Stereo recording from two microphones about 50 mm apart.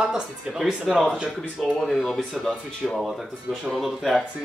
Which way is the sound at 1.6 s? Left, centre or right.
Centre.